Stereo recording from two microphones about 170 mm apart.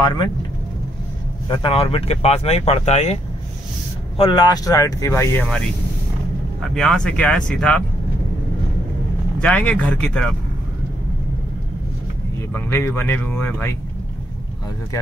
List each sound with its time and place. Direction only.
0.0 s speech: 25° left (ahead or behind)
1.5 s speech: 30° left (ahead or behind)
4.2 s speech: 30° left (ahead or behind)
6.7 s speech: 5° left (ahead or behind)
9.4 s speech: 10° left (ahead or behind)
12.5 s speech: 15° left (ahead or behind)